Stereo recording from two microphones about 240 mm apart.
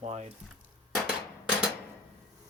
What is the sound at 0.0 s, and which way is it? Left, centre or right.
Speech, right.